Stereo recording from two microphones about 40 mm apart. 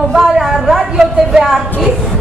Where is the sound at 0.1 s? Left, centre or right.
Centre.